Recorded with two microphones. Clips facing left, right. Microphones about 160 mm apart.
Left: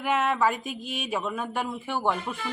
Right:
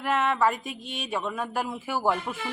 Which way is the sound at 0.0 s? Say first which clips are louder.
Even; centre (ahead or behind).